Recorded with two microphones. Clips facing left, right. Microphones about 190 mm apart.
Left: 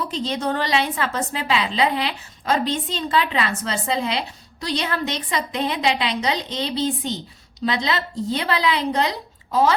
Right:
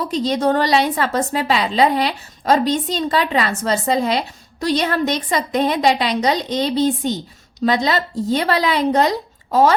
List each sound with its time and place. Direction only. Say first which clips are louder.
0.1 s a woman's voice: right 7 dB; 40° right (ahead or behind)